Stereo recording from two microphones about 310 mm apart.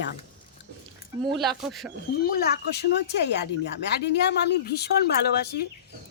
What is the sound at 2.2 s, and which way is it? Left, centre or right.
Speech, left.